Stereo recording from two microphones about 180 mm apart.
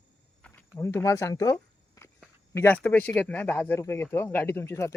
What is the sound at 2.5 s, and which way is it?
Speech, 10° left (ahead or behind).